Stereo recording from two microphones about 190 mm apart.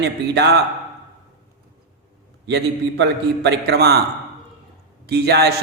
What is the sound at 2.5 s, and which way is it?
A man's voice, 65° right (ahead or behind).